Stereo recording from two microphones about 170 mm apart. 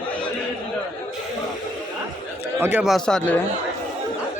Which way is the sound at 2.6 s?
10° right (ahead or behind).